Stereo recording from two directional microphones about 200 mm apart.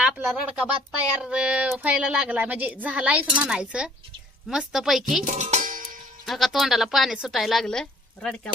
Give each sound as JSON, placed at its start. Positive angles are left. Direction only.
{"t": 0.0, "sound": "a woman's voice", "side_deg": -10}
{"t": 5.2, "sound": "music", "side_deg": -40}
{"t": 6.2, "sound": "a woman's voice", "side_deg": 0}